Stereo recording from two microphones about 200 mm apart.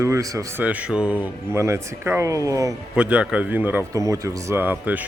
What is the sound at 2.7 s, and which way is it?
A man's voice, 5° right (ahead or behind).